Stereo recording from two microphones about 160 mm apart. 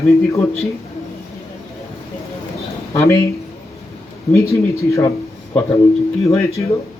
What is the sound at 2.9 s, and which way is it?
Speech, 20° left (ahead or behind).